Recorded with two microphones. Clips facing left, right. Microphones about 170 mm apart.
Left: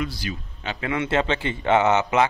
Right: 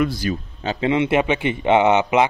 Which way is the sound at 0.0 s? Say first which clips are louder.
Right 8 dB; 45° right (ahead or behind).